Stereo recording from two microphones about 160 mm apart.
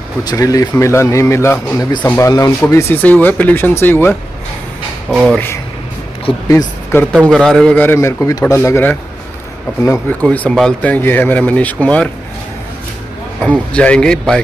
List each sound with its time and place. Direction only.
0.2 s speech: 25° left (ahead or behind)
5.1 s speech: centre (ahead or behind)
6.9 s speech: 15° left (ahead or behind)
10.2 s speech: 5° left (ahead or behind)
13.4 s speech: 10° left (ahead or behind)